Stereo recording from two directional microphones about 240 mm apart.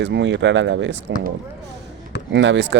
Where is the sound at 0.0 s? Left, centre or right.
Right.